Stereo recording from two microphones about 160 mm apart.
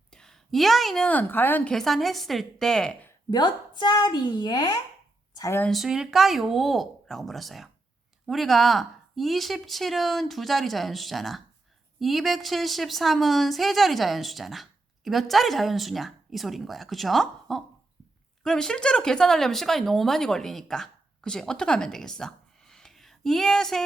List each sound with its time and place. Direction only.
0.1 s a woman's voice: 5° left (ahead or behind)
3.2 s a child's voice: 30° left (ahead or behind)
5.6 s a woman's voice: centre (ahead or behind)